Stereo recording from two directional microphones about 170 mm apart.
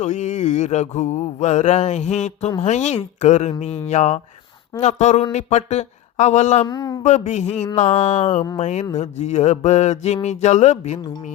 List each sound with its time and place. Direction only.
0.0 s mantra: 45° left (ahead or behind)
6.7 s speech: 20° left (ahead or behind)
7.0 s mantra: 45° left (ahead or behind)